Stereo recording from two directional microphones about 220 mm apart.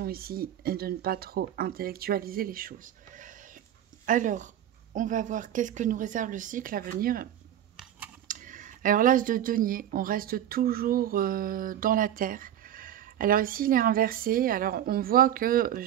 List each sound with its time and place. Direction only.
0.0 s speech: 45° right (ahead or behind)
8.3 s speech: 35° right (ahead or behind)